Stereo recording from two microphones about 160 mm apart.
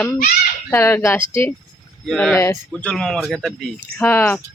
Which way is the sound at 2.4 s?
15° left (ahead or behind).